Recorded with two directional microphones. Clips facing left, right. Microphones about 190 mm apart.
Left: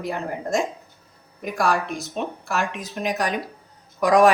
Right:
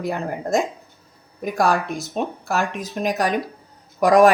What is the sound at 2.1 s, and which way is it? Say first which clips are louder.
Speech: right 3 dB; 40° right (ahead or behind).